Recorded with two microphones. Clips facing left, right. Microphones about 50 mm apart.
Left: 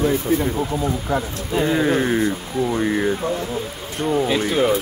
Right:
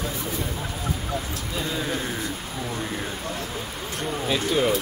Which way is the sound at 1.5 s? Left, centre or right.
Left.